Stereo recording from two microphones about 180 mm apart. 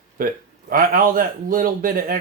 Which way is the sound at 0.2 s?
50° right (ahead or behind).